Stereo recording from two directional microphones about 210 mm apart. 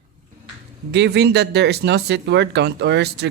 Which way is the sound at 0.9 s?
55° right (ahead or behind).